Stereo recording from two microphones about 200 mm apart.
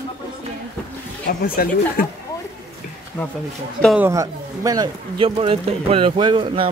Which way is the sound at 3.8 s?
10° right (ahead or behind).